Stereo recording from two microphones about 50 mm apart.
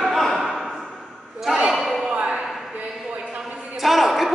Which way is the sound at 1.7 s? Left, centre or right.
Centre.